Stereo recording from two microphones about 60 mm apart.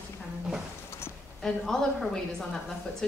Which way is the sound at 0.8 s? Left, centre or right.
Left.